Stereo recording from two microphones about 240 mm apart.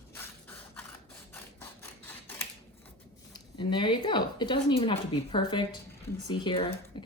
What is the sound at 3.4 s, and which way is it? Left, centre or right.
A woman's voice, centre.